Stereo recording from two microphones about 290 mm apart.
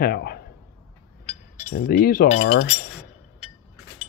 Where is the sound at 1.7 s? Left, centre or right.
Left.